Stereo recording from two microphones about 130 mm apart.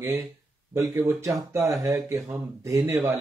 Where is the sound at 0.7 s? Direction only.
25° right (ahead or behind).